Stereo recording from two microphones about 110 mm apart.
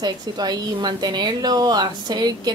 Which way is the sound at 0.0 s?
40° right (ahead or behind).